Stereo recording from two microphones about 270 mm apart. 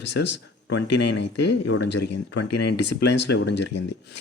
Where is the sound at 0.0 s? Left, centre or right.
Left.